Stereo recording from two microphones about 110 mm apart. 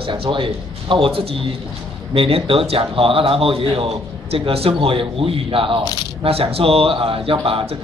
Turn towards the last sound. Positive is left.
turn(degrees=-55)  # may be behind; listen again after turning